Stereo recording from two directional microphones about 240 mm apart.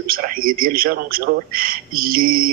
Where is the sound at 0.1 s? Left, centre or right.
Right.